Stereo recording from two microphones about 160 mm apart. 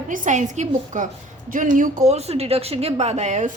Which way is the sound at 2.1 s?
40° right (ahead or behind).